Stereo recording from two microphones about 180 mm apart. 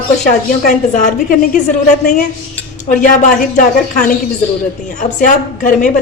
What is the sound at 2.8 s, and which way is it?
A woman's voice, 45° left (ahead or behind).